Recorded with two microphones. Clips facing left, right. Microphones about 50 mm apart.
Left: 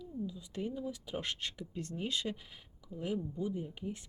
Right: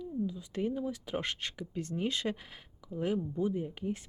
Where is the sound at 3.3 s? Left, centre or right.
Right.